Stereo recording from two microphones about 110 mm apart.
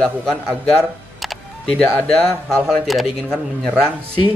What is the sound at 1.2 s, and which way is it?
Music, centre (ahead or behind).